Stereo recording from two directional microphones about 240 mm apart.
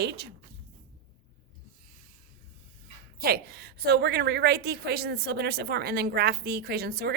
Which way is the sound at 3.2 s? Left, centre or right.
Right.